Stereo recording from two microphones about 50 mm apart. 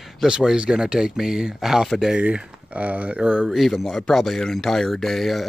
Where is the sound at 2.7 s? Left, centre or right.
Right.